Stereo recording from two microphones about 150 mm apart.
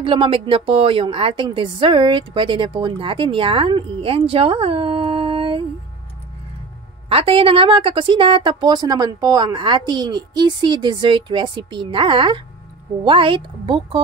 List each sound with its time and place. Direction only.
0.0 s a woman's voice: 35° right (ahead or behind)
7.1 s a woman's voice: 40° right (ahead or behind)